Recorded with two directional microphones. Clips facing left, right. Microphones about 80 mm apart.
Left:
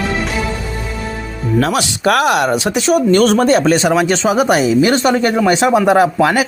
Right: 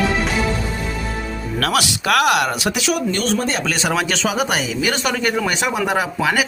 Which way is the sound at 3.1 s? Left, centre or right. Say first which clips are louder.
Left 10 dB; left.